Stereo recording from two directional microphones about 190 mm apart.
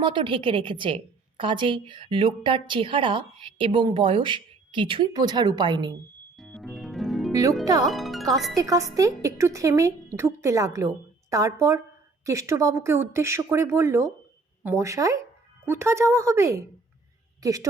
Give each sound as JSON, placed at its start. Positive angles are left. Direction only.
{"t": 0.0, "sound": "a woman's voice", "side_deg": -25}
{"t": 6.3, "sound": "music", "side_deg": 0}
{"t": 7.6, "sound": "a woman's voice", "side_deg": -20}
{"t": 7.9, "sound": "speech", "side_deg": 0}
{"t": 8.5, "sound": "a woman's voice", "side_deg": -20}